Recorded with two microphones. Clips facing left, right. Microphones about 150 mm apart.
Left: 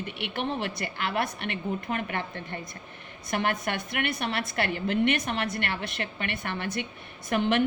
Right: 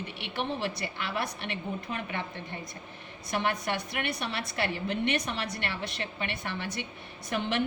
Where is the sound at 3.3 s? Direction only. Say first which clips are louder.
Left 2 dB; 55° left (ahead or behind).